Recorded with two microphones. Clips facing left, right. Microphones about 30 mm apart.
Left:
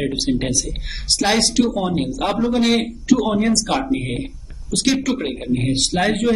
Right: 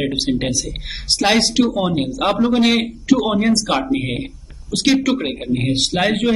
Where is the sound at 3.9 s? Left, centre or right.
Right.